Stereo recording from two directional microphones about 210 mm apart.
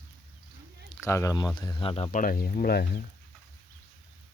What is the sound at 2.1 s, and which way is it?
Speech, 45° left (ahead or behind).